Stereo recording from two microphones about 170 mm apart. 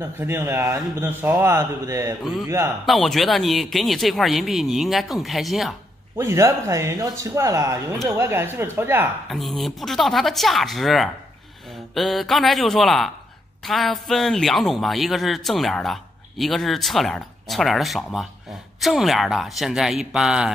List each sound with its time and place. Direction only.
0.0 s a man's voice: 15° right (ahead or behind)
2.9 s a man's voice: centre (ahead or behind)
6.1 s a man's voice: 15° right (ahead or behind)
9.3 s a man's voice: centre (ahead or behind)